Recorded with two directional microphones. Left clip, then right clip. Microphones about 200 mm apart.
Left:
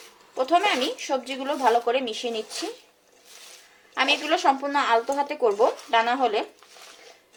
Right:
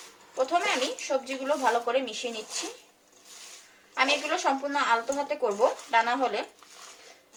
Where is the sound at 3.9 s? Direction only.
50° left (ahead or behind).